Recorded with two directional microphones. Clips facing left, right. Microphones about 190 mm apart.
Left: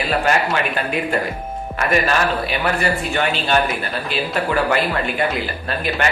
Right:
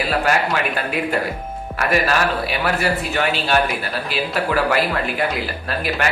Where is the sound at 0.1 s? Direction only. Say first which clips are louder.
Left 2 dB; 5° right (ahead or behind).